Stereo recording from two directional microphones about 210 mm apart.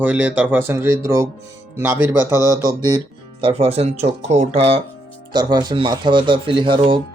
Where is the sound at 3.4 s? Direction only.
25° right (ahead or behind).